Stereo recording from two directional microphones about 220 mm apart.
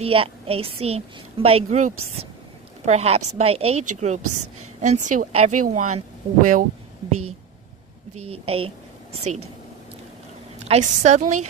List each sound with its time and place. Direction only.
0.0 s a woman's voice: 25° right (ahead or behind)
8.3 s a woman's voice: 25° right (ahead or behind)
10.7 s speech: 30° right (ahead or behind)